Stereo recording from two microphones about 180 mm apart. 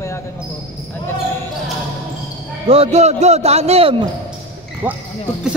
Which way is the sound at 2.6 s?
35° right (ahead or behind).